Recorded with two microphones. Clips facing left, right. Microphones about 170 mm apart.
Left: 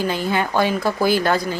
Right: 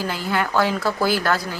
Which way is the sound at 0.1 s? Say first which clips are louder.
Left 2 dB; 20° left (ahead or behind).